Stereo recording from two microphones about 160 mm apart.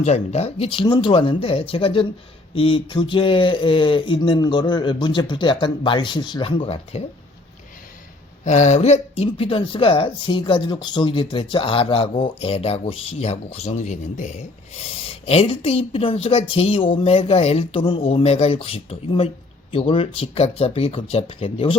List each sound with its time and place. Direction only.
0.0 s speech: 45° left (ahead or behind)
8.4 s speech: 50° left (ahead or behind)